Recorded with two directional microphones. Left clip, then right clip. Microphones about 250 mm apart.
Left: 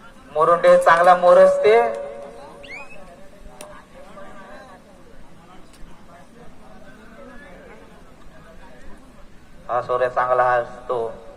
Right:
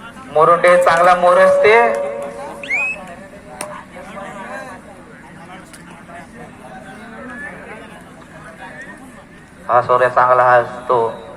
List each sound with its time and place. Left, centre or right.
0.3 s a man's voice: left
9.6 s a man's voice: left